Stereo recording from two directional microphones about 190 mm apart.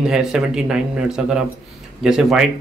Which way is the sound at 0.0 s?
5° right (ahead or behind).